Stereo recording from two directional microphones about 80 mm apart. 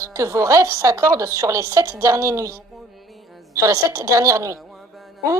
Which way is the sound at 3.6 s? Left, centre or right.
Right.